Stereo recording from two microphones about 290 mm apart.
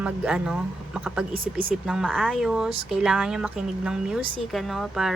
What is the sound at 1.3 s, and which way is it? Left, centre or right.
Speech, right.